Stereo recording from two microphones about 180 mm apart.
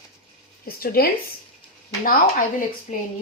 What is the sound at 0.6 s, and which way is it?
Speech, 55° left (ahead or behind).